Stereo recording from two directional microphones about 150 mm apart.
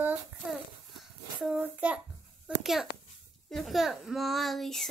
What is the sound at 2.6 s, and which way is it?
Speech, centre (ahead or behind).